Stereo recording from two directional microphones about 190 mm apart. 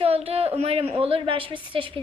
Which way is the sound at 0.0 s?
30° right (ahead or behind).